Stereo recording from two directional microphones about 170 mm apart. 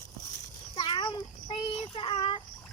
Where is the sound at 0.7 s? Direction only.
30° left (ahead or behind).